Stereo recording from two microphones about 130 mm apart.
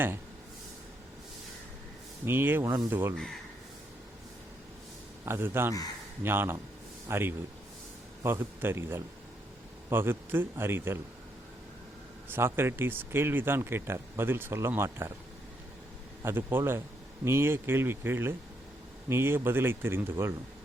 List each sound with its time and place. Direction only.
2.2 s speech: 15° right (ahead or behind)
5.2 s speech: 20° right (ahead or behind)
12.3 s speech: 20° right (ahead or behind)
16.2 s speech: 15° right (ahead or behind)